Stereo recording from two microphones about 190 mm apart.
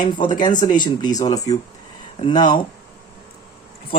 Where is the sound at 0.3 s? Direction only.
20° left (ahead or behind).